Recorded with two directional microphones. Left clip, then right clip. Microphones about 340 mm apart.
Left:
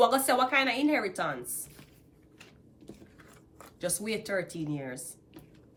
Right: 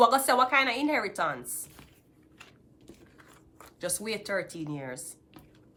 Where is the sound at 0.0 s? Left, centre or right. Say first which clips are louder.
Right 2 dB; centre.